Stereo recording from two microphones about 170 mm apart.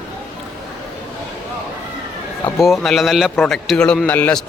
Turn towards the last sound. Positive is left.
turn(degrees=10)  # may be behind; listen again after turning